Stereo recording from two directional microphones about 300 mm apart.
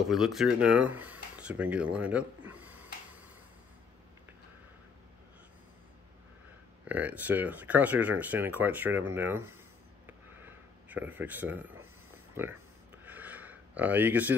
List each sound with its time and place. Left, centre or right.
0.1 s speech: centre
6.9 s speech: centre
10.0 s a sound: centre